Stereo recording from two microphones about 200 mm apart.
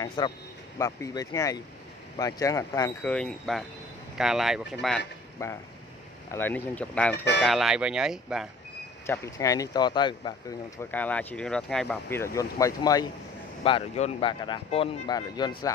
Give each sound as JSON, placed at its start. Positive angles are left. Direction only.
{"t": 0.0, "sound": "speech", "side_deg": 20}
{"t": 3.1, "sound": "speech", "side_deg": 5}
{"t": 5.4, "sound": "speech", "side_deg": 15}
{"t": 9.0, "sound": "speech", "side_deg": 15}
{"t": 10.8, "sound": "speech", "side_deg": 10}
{"t": 13.7, "sound": "speech", "side_deg": 30}